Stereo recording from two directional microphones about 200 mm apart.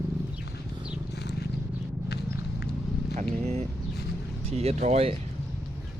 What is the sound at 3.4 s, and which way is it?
Speech, 30° right (ahead or behind).